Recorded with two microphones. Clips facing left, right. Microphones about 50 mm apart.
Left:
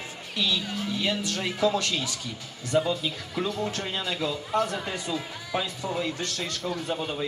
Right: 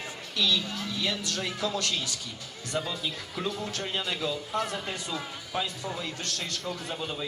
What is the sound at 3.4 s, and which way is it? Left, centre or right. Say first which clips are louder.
Speech: left 4 dB; centre.